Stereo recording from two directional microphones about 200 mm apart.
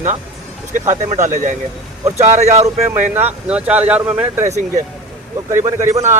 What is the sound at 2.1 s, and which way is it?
Speech, 35° right (ahead or behind).